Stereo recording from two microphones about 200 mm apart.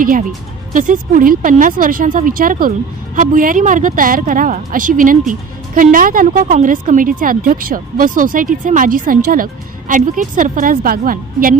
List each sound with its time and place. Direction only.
0.0 s speech: 45° right (ahead or behind)